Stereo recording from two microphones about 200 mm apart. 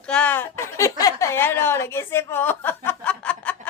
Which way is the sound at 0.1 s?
5° left (ahead or behind).